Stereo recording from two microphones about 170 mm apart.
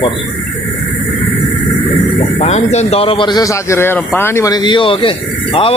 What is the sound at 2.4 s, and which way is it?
A man's voice, 40° left (ahead or behind).